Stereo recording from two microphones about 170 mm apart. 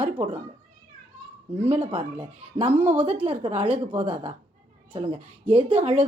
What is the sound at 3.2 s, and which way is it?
A woman's voice, 35° right (ahead or behind).